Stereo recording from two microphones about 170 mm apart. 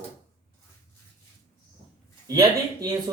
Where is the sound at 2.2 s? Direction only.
20° right (ahead or behind).